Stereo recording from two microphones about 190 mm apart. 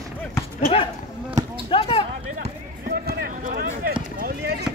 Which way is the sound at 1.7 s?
30° left (ahead or behind).